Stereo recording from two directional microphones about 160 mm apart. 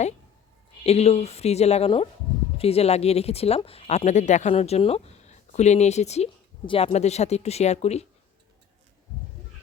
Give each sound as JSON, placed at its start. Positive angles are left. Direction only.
{"t": 0.9, "sound": "speech", "side_deg": 40}